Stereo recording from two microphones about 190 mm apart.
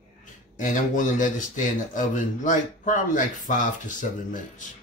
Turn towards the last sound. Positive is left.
turn(degrees=45)  # may be behind; listen again after turning